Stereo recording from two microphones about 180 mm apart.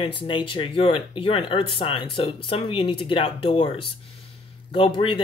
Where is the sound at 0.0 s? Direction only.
25° left (ahead or behind).